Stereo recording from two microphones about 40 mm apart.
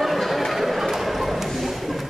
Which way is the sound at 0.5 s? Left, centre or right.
Centre.